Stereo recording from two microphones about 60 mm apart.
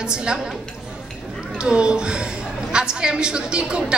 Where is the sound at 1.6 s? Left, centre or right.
Centre.